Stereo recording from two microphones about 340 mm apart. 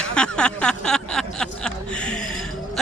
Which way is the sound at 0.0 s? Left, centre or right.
Centre.